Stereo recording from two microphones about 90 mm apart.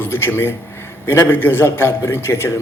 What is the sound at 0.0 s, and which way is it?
A man's voice, 25° left (ahead or behind).